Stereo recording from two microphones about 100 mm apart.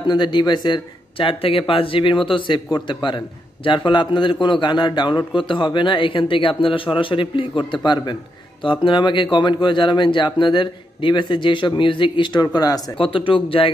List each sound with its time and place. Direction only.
0.0 s a man's voice: 50° left (ahead or behind)
12.9 s speech: 60° left (ahead or behind)